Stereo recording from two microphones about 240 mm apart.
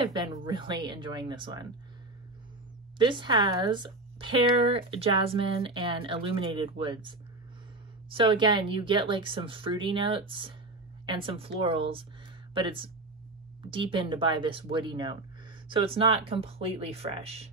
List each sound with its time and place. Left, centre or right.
0.0 s speech: centre
3.0 s speech: centre